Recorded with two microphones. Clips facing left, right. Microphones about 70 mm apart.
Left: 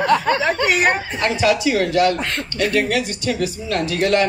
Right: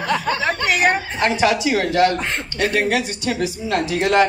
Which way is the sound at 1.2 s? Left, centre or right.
Right.